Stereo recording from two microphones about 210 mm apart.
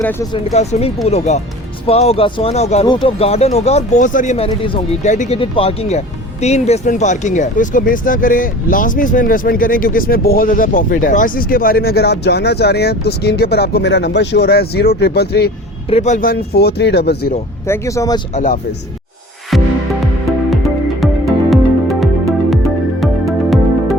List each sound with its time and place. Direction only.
0.3 s speech: 30° left (ahead or behind); by 15.5 s 50° left (ahead or behind)
15.9 s speech: 35° left (ahead or behind); by 17.3 s 50° left (ahead or behind)
17.7 s speech: 15° left (ahead or behind)
18.3 s speech: 40° left (ahead or behind)
21.0 s music: centre (ahead or behind)